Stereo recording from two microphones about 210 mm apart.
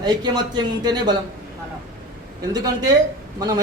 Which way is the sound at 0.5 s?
20° right (ahead or behind).